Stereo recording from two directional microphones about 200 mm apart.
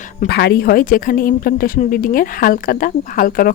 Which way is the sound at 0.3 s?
55° left (ahead or behind).